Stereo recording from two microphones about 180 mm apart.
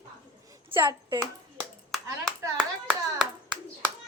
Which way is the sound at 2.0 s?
20° right (ahead or behind).